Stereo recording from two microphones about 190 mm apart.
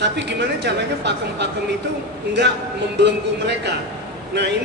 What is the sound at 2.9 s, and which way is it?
Speech, 65° right (ahead or behind).